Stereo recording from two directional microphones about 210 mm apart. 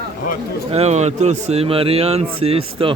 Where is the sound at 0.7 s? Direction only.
30° right (ahead or behind).